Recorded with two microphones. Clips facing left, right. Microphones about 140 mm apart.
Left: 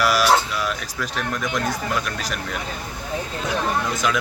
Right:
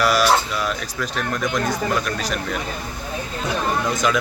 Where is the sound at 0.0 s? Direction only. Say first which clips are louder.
Right 1 dB; 5° left (ahead or behind).